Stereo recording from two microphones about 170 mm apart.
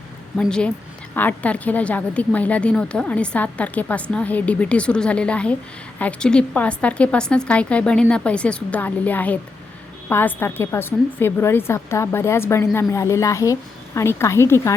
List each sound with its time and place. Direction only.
0.3 s a woman's voice: 5° left (ahead or behind)